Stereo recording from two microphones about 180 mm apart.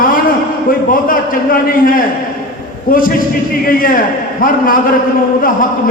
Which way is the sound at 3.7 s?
50° left (ahead or behind).